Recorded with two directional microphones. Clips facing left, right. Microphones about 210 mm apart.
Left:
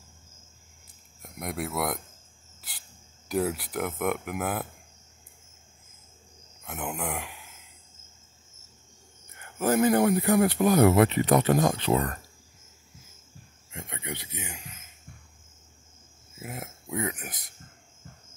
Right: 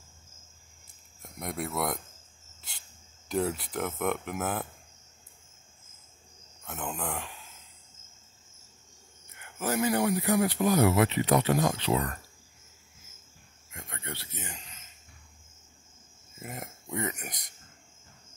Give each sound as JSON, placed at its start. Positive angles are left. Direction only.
{"t": 1.2, "sound": "speech", "side_deg": 5}
{"t": 3.3, "sound": "speech", "side_deg": 5}
{"t": 6.6, "sound": "speech", "side_deg": 10}
{"t": 9.6, "sound": "speech", "side_deg": 50}
{"t": 13.7, "sound": "speech", "side_deg": 20}
{"t": 16.3, "sound": "speech", "side_deg": 5}